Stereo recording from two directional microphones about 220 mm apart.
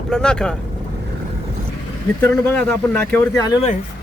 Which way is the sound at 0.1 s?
5° left (ahead or behind).